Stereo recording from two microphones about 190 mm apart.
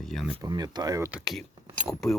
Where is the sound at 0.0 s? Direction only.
Centre (ahead or behind).